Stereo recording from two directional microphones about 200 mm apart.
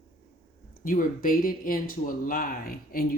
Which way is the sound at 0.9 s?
45° left (ahead or behind).